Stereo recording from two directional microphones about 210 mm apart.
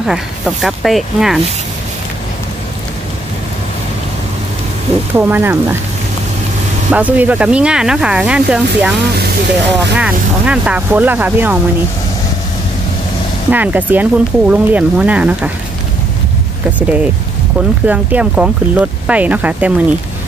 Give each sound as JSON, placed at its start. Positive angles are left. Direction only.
{"t": 0.0, "sound": "speech", "side_deg": 0}
{"t": 5.1, "sound": "speech", "side_deg": -10}
{"t": 6.9, "sound": "speech", "side_deg": -5}
{"t": 9.9, "sound": "speech", "side_deg": -5}
{"t": 13.5, "sound": "speech", "side_deg": -10}
{"t": 16.7, "sound": "speech", "side_deg": -5}